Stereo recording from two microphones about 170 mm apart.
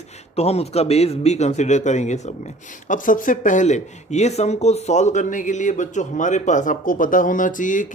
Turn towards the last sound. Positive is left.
turn(degrees=50)  # may be behind; listen again after turning